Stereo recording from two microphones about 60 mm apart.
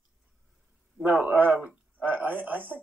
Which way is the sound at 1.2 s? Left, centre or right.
Centre.